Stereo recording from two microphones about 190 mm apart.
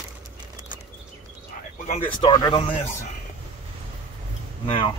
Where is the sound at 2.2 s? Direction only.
25° left (ahead or behind).